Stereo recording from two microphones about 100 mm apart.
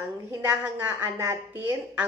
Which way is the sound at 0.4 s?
25° right (ahead or behind).